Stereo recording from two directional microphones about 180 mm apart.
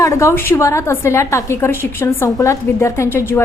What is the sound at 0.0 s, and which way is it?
A woman's voice, 15° left (ahead or behind).